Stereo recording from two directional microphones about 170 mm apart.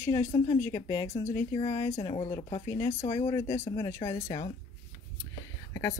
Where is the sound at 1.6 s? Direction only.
40° left (ahead or behind).